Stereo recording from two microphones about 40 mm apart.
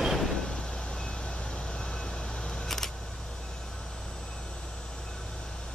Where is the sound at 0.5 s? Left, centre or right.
Left.